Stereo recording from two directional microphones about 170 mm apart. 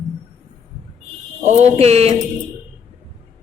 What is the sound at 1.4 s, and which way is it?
Speech, 40° right (ahead or behind).